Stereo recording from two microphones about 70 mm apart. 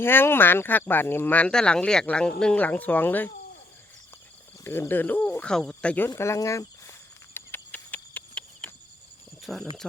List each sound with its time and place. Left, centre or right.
0.0 s speech: left
1.5 s speech: centre
4.6 s speech: left
5.4 s speech: centre
6.1 s speech: left
7.3 s a sound: left
9.4 s speech: centre